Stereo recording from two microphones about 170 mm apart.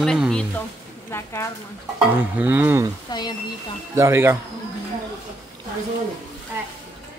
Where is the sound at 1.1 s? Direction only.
15° left (ahead or behind).